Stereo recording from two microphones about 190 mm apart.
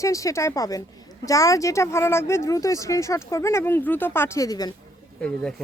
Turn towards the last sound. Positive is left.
turn(degrees=5)  # may be behind; listen again after turning